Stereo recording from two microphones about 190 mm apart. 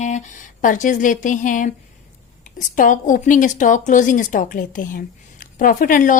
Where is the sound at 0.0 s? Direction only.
40° left (ahead or behind).